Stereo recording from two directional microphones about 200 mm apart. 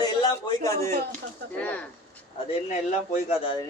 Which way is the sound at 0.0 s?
20° left (ahead or behind).